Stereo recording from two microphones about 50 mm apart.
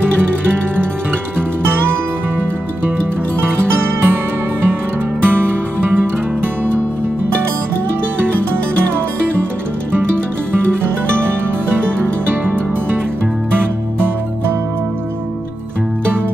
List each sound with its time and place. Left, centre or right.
3.3 s music: right
5.2 s music: right
11.1 s music: right